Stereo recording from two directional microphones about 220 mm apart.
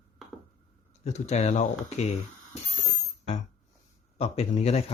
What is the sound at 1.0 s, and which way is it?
Speech, 30° left (ahead or behind).